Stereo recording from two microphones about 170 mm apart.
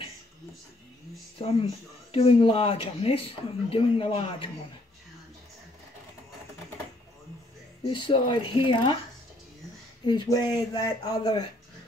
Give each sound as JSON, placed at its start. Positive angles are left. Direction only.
{"t": 2.1, "sound": "speech", "side_deg": 35}
{"t": 7.8, "sound": "speech", "side_deg": 30}
{"t": 10.0, "sound": "speech", "side_deg": 25}